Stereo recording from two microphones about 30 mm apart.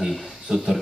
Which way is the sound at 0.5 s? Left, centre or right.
Right.